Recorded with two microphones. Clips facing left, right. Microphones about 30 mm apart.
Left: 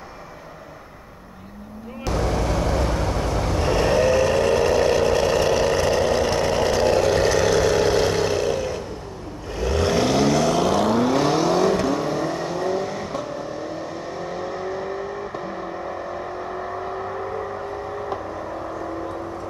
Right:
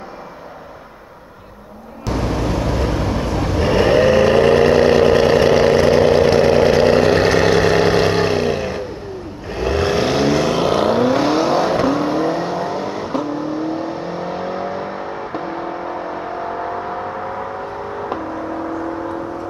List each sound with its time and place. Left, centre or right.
2.0 s vehicle: centre